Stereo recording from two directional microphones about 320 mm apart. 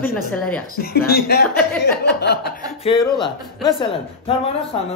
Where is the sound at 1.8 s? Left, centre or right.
Left.